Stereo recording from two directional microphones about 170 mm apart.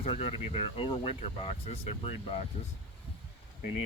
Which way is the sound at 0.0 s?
35° left (ahead or behind).